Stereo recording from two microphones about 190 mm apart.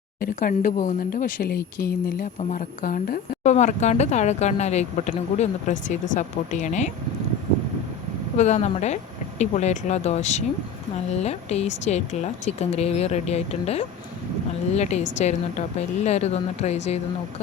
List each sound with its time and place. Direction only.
0.2 s speech: 50° left (ahead or behind)
3.4 s a woman's voice: 35° left (ahead or behind)
8.4 s a woman's voice: 35° left (ahead or behind)